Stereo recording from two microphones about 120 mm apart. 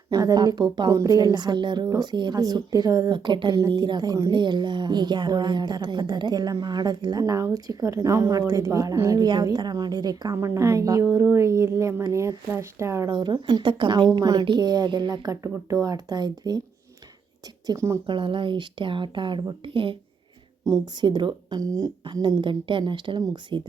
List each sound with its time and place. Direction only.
0.1 s a woman's voice: 35° right (ahead or behind)
13.1 s a woman's voice: 40° right (ahead or behind)
17.7 s speech: 25° right (ahead or behind)
18.0 s speech: 40° right (ahead or behind)
20.7 s speech: 25° right (ahead or behind)
21.0 s a woman's voice: 40° right (ahead or behind)